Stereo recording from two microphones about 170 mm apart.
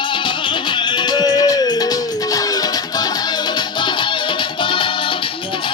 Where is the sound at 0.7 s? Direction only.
25° left (ahead or behind).